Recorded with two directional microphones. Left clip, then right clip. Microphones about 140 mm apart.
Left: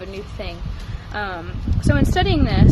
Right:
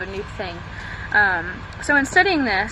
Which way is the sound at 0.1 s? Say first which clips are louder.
Right 3 dB; 15° left (ahead or behind).